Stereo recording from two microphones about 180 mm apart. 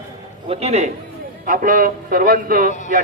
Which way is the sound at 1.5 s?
50° right (ahead or behind).